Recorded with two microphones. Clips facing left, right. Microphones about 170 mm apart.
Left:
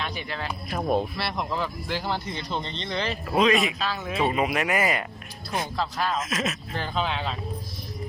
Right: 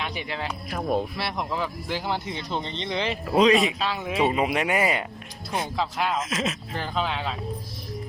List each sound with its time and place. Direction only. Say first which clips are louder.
0.0 s speech: right 1 dB; 20° right (ahead or behind)
1.1 s speech: even; 10° right (ahead or behind)
3.3 s speech: right 3 dB; 30° right (ahead or behind); by 6.2 s 15° right (ahead or behind)
6.2 s speech: right 1 dB; 25° right (ahead or behind)
6.7 s speech: even; 10° right (ahead or behind)